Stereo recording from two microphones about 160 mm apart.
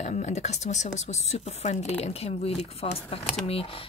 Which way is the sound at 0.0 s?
45° left (ahead or behind).